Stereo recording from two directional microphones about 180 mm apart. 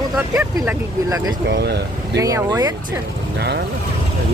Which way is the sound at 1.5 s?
65° right (ahead or behind).